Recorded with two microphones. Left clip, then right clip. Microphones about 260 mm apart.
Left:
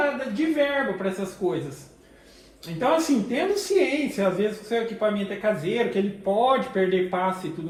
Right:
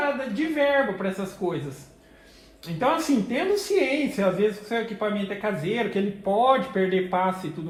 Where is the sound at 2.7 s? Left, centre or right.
Right.